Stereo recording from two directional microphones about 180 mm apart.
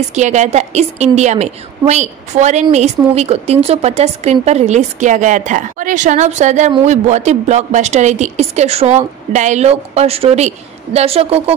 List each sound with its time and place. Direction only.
0.1 s a woman's voice: 40° right (ahead or behind)